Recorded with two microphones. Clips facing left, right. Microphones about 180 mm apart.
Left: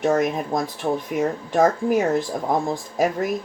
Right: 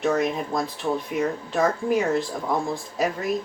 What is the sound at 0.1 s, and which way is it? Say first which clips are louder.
Speech: left 3 dB; 50° left (ahead or behind).